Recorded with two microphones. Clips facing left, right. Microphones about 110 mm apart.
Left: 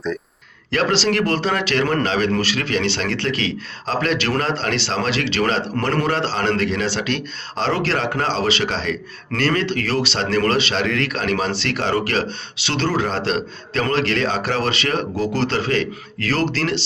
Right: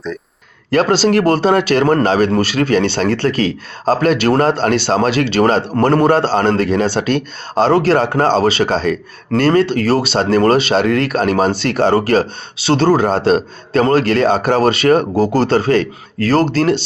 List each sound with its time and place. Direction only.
0.7 s a man's voice: 40° right (ahead or behind)
9.5 s a man's voice: 35° right (ahead or behind)